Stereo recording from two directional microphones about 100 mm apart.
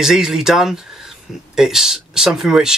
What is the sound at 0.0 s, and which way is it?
Speech, 5° right (ahead or behind).